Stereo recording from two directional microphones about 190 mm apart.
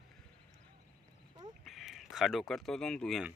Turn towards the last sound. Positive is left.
turn(degrees=0)  # may be behind; listen again after turning